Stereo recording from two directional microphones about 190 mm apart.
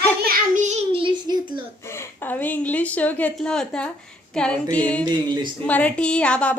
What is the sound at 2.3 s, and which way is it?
A woman's voice, 10° left (ahead or behind).